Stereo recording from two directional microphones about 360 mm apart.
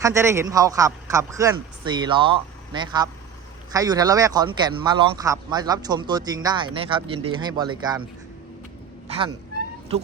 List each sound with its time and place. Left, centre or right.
0.0 s speech: centre
9.0 s speech: centre